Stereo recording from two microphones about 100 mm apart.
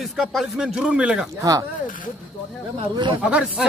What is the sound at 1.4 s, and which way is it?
Speech, 35° right (ahead or behind).